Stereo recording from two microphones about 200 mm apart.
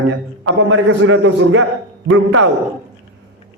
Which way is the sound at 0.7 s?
75° right (ahead or behind).